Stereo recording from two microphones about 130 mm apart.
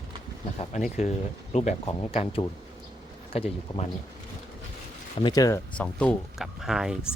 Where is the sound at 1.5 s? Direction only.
55° left (ahead or behind).